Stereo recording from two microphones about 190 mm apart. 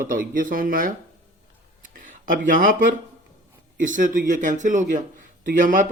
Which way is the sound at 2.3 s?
45° right (ahead or behind).